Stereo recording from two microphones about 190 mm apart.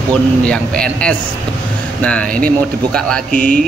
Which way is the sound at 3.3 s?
45° right (ahead or behind).